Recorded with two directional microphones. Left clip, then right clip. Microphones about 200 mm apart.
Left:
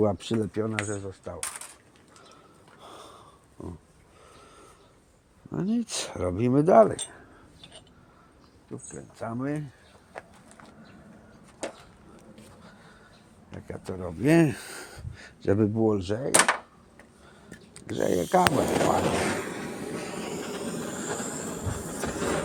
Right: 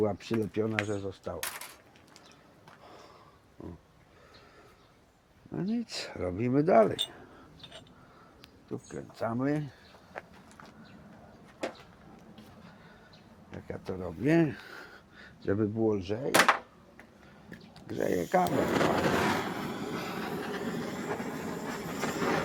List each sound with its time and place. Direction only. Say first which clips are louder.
0.0 s speech: left 5 dB; 40° left (ahead or behind)
0.3 s speech: left 2 dB; 20° left (ahead or behind)
2.8 s a sound: left 7 dB; 45° left (ahead or behind)
5.5 s speech: left 5 dB; 40° left (ahead or behind)
8.9 s speech: right 2 dB; 10° left (ahead or behind)
10.2 s walk: left 1 dB; 15° left (ahead or behind)
13.7 s speech: left 2 dB; 40° left (ahead or behind)
17.7 s a sound: left 5 dB; 30° left (ahead or behind)
18.0 s speech: left 5 dB; 55° left (ahead or behind)
18.5 s speech: left 4 dB; 20° left (ahead or behind)
19.1 s train: left 1 dB; 5° right (ahead or behind)